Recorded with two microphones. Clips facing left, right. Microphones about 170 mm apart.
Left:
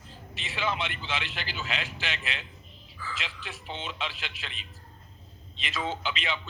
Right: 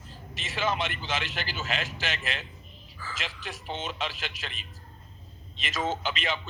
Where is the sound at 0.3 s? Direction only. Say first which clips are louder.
Right 2 dB; 45° right (ahead or behind).